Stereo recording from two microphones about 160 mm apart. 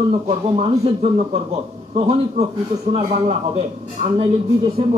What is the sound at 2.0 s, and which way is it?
Speech, 40° right (ahead or behind).